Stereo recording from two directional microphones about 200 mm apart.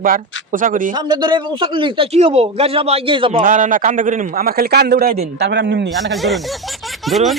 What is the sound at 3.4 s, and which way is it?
A man's voice, 40° right (ahead or behind).